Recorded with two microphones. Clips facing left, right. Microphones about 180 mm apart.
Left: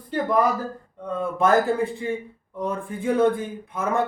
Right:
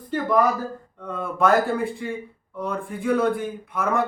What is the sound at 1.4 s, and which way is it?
Speech, 20° left (ahead or behind).